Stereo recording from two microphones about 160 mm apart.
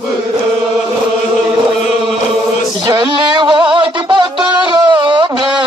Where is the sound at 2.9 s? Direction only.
30° right (ahead or behind).